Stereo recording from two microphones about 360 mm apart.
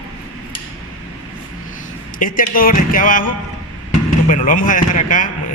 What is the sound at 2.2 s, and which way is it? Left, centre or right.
Speech, left.